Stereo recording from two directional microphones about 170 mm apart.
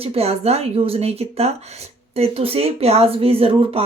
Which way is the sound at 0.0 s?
35° right (ahead or behind).